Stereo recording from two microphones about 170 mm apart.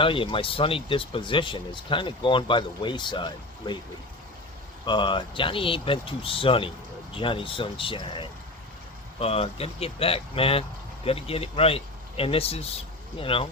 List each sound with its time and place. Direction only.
0.0 s speech: 30° left (ahead or behind)
4.9 s speech: 30° left (ahead or behind)